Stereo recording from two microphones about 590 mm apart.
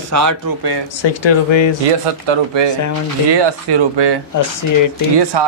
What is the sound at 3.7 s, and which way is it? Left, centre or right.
Speech, right.